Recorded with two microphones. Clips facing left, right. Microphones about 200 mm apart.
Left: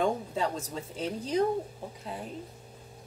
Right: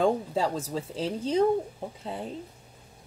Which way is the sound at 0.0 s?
30° right (ahead or behind).